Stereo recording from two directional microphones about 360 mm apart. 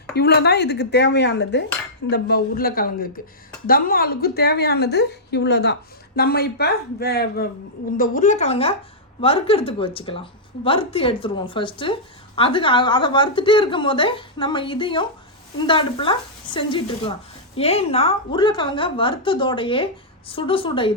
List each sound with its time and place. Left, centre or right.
0.1 s a woman's voice: left